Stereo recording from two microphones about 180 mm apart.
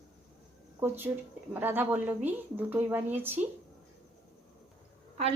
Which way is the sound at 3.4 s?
45° right (ahead or behind).